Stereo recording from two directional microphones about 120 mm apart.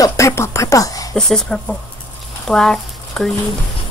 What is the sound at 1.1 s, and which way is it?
Speech, 5° left (ahead or behind).